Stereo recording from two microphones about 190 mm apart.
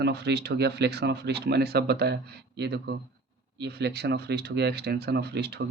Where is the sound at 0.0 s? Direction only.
60° right (ahead or behind).